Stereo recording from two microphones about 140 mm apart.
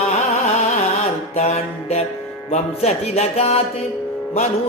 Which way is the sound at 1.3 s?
50° left (ahead or behind).